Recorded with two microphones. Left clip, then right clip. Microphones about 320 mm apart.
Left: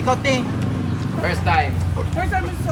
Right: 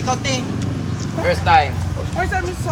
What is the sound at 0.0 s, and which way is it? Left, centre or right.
Speech, left.